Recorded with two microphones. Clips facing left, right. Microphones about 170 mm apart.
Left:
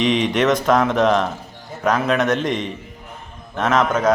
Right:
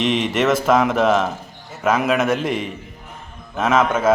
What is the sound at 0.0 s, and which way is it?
A man's voice, centre (ahead or behind).